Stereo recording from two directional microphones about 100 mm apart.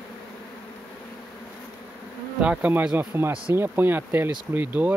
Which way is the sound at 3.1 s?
25° right (ahead or behind).